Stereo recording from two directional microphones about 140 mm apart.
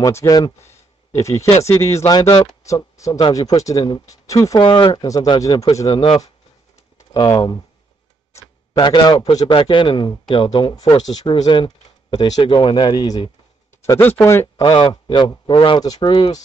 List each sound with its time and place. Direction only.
0.0 s speech: 20° left (ahead or behind)
4.6 s speech: 35° left (ahead or behind)
5.9 s speech: 40° left (ahead or behind)
7.2 s speech: 30° left (ahead or behind)
8.3 s tick-tock: 20° left (ahead or behind)
8.8 s speech: 30° left (ahead or behind)
13.8 s speech: 15° left (ahead or behind)
14.6 s speech: 35° left (ahead or behind)